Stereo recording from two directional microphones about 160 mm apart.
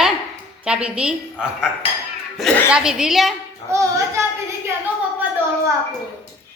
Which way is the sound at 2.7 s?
5° right (ahead or behind).